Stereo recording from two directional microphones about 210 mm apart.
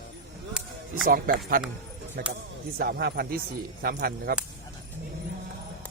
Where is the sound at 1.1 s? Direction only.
45° right (ahead or behind).